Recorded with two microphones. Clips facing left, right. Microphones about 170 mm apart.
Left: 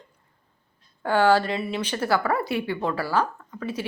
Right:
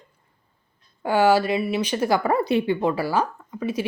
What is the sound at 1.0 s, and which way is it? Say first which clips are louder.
A woman's voice: right 1 dB; 10° right (ahead or behind).